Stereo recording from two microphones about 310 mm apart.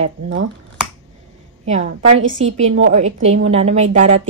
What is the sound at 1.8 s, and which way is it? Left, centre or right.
Speech, right.